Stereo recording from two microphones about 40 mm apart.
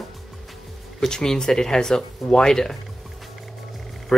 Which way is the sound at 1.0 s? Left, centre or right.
Centre.